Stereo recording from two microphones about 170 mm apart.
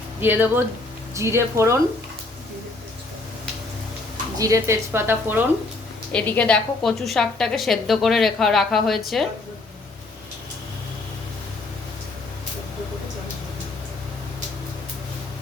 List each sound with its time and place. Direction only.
0.2 s a woman's voice: 10° right (ahead or behind)
4.4 s a woman's voice: 20° right (ahead or behind)
6.1 s a woman's voice: 10° left (ahead or behind)